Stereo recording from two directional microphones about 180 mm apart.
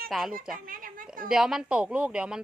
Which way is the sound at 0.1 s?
Centre (ahead or behind).